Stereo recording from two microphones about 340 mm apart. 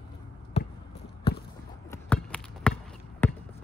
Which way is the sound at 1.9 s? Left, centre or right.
Centre.